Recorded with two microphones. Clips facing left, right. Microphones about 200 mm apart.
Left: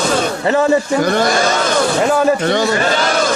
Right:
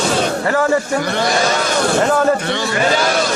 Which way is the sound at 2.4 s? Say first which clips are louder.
Left 6 dB; 45° left (ahead or behind).